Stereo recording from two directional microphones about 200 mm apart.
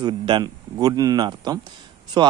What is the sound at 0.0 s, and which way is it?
Speech, 25° right (ahead or behind).